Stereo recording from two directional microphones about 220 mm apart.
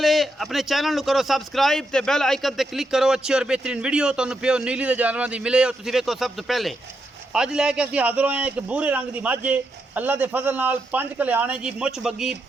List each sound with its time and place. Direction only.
0.0 s a man's voice: centre (ahead or behind)